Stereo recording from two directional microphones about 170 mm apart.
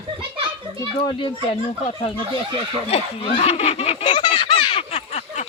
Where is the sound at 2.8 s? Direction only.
35° left (ahead or behind).